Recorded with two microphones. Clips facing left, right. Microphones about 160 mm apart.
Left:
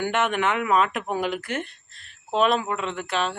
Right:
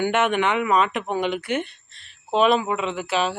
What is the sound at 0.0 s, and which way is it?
Speech, centre (ahead or behind).